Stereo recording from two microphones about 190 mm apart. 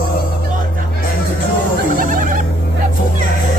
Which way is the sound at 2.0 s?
45° right (ahead or behind).